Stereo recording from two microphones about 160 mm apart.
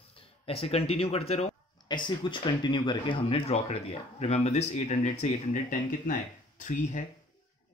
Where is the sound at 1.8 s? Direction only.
30° left (ahead or behind); by 5.3 s 45° left (ahead or behind).